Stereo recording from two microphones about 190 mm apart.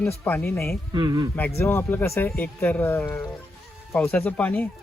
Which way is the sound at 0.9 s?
20° right (ahead or behind).